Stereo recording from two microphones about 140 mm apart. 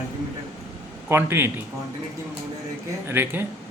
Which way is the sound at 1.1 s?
15° right (ahead or behind).